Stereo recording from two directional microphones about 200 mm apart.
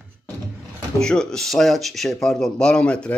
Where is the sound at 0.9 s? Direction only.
5° left (ahead or behind).